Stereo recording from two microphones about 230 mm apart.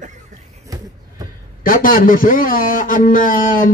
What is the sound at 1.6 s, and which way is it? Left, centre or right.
Speech, left.